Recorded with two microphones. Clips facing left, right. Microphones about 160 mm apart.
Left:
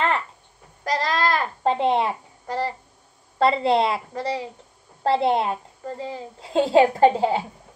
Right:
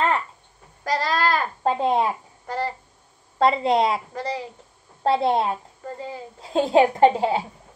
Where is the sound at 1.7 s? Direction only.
30° left (ahead or behind).